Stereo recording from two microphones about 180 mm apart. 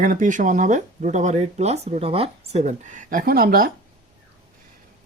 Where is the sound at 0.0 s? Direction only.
50° right (ahead or behind).